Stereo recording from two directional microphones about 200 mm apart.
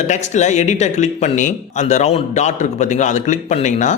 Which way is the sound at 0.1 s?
35° left (ahead or behind).